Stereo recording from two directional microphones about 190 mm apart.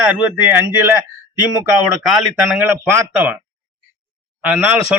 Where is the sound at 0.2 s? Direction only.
10° right (ahead or behind).